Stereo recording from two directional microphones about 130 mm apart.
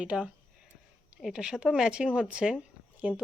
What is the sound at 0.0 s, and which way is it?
A woman's voice, 10° right (ahead or behind).